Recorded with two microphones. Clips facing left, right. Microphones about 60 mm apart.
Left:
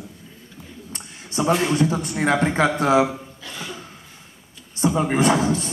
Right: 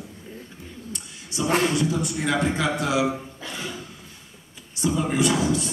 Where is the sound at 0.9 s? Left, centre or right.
Left.